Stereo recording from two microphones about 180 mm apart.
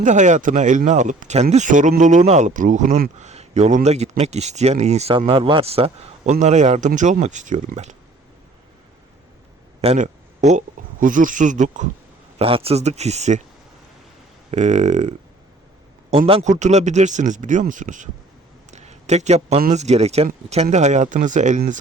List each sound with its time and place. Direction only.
0.0 s speech: 40° right (ahead or behind)
9.8 s a sound: 40° right (ahead or behind)
11.0 s speech: 45° right (ahead or behind)
12.4 s speech: 30° right (ahead or behind)
14.5 s speech: 40° right (ahead or behind)
18.7 s a sound: 40° right (ahead or behind)
19.7 s speech: 40° right (ahead or behind)